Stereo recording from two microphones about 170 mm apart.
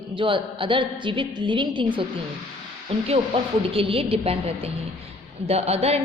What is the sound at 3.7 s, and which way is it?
A woman's voice, 35° right (ahead or behind).